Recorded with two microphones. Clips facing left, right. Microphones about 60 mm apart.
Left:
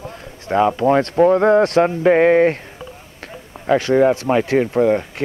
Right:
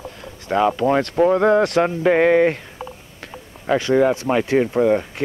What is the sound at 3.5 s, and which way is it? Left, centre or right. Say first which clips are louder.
Run: left 3 dB; left.